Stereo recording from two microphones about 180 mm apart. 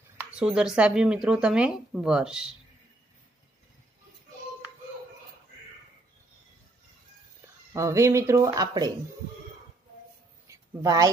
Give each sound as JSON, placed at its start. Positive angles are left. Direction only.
{"t": 0.4, "sound": "speech", "side_deg": -5}
{"t": 7.7, "sound": "speech", "side_deg": -15}
{"t": 10.4, "sound": "a sound", "side_deg": -15}